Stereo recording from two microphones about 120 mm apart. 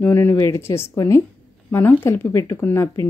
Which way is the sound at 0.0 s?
20° left (ahead or behind).